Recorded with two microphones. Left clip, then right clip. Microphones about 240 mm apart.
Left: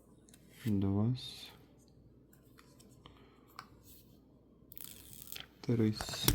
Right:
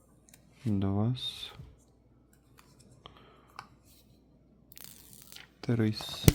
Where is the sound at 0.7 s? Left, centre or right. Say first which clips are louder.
Right 3 dB; centre.